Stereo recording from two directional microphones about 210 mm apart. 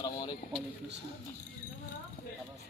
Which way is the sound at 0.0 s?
20° left (ahead or behind).